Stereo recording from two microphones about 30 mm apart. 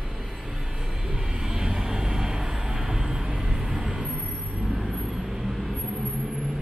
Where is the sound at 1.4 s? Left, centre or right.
Centre.